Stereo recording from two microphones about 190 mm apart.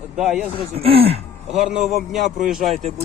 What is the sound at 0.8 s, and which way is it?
Speech, 30° right (ahead or behind).